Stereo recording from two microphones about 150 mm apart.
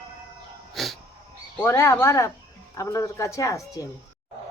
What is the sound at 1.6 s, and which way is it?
Speech, 20° left (ahead or behind).